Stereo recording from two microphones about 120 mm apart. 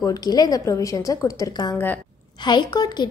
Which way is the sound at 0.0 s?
30° left (ahead or behind).